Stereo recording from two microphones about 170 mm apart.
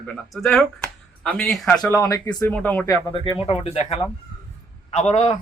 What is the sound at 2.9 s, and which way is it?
Speech, 25° left (ahead or behind).